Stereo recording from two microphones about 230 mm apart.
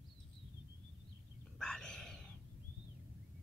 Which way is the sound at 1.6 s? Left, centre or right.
Centre.